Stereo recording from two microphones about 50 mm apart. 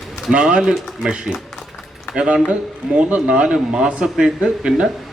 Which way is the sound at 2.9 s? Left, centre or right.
Right.